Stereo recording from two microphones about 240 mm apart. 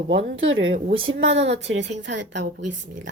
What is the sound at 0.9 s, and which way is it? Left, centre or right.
Speech, right.